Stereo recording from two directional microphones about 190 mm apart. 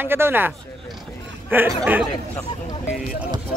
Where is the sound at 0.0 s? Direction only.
10° right (ahead or behind).